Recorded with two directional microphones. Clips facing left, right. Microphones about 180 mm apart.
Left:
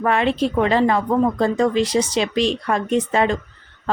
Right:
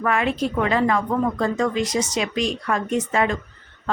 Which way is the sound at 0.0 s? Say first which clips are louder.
Left 3 dB; 30° left (ahead or behind).